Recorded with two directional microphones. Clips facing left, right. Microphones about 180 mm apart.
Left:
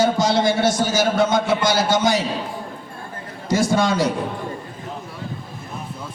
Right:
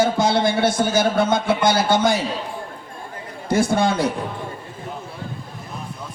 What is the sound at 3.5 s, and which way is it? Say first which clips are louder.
Speech: even; 55° right (ahead or behind).